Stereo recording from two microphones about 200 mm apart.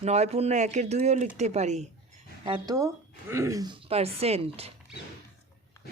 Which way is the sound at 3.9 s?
30° right (ahead or behind).